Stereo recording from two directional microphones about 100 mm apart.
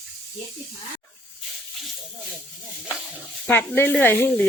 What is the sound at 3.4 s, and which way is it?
Speech, 20° left (ahead or behind).